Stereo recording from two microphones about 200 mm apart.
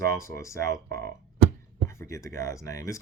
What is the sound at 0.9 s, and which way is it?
Speech, 50° right (ahead or behind).